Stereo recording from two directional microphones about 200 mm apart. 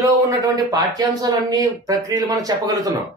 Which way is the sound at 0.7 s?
20° right (ahead or behind).